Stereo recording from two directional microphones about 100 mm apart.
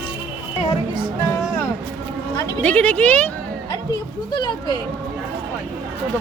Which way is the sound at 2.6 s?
15° left (ahead or behind).